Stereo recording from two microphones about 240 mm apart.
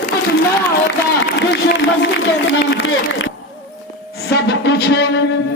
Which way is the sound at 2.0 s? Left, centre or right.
Left.